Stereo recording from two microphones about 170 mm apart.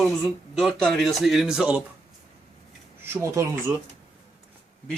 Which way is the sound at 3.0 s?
15° right (ahead or behind).